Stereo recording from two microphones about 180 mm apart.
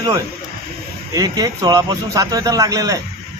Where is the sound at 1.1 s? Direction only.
20° right (ahead or behind).